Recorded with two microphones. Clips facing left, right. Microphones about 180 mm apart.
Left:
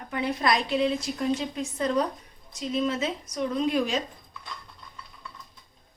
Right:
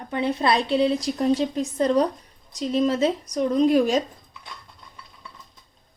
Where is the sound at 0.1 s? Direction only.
25° right (ahead or behind); by 4.0 s 40° right (ahead or behind).